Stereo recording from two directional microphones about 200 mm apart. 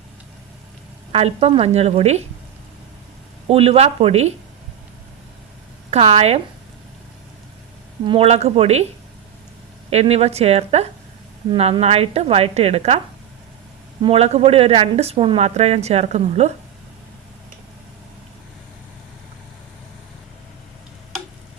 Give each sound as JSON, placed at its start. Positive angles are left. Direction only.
{"t": 1.1, "sound": "speech", "side_deg": -30}
{"t": 3.4, "sound": "speech", "side_deg": -30}
{"t": 5.9, "sound": "speech", "side_deg": -30}
{"t": 8.0, "sound": "speech", "side_deg": -25}
{"t": 9.9, "sound": "speech", "side_deg": -30}
{"t": 14.0, "sound": "speech", "side_deg": -30}